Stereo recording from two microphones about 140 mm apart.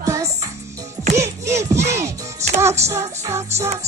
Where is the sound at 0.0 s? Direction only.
25° right (ahead or behind).